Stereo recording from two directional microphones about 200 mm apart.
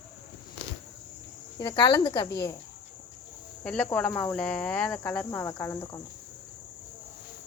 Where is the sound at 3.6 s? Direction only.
5° left (ahead or behind).